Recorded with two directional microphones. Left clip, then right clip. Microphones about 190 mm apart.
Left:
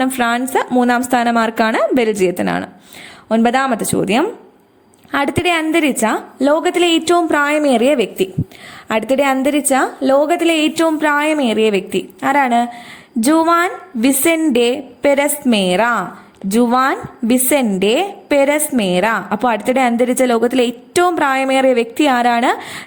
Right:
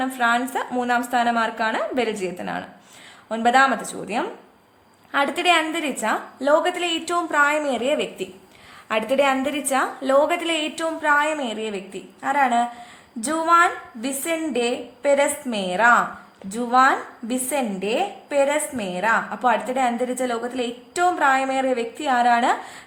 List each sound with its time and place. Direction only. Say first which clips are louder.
0.0 s a woman's voice: left 4 dB; 35° left (ahead or behind)